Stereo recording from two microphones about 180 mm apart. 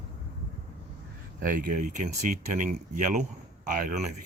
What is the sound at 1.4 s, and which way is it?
Speech, 50° right (ahead or behind).